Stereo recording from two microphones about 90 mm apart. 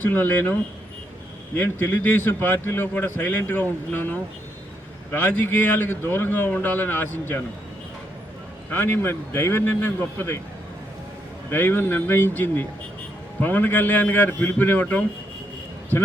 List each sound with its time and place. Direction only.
0.0 s a man's voice: 20° left (ahead or behind)
1.5 s a man's voice: 25° left (ahead or behind)
8.7 s a man's voice: 25° left (ahead or behind)
11.5 s a man's voice: 25° left (ahead or behind)